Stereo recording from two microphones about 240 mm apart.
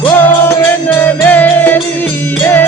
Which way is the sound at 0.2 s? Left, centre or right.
Centre.